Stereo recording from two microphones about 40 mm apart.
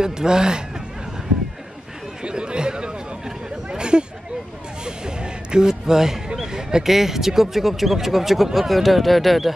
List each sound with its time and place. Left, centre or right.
0.0 s speech: centre
2.2 s chatter: right
4.8 s speech: centre